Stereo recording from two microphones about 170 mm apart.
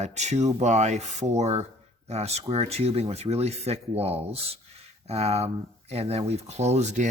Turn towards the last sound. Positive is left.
turn(degrees=-40)  # may be behind; listen again after turning